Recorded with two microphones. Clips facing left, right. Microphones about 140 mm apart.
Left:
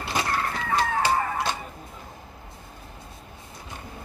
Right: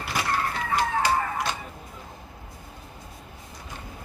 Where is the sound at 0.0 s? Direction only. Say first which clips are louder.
Left 2 dB; 25° left (ahead or behind).